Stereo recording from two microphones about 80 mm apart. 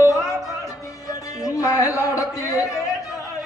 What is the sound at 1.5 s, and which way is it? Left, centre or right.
Music, left.